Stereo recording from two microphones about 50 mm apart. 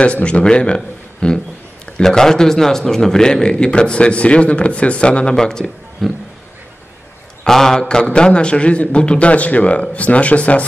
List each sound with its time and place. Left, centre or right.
0.0 s a man's voice: left
6.0 s a sound: centre
7.4 s a man's voice: centre; by 10.6 s left